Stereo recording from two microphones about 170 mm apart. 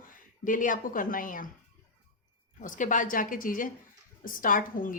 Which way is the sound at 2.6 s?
50° left (ahead or behind).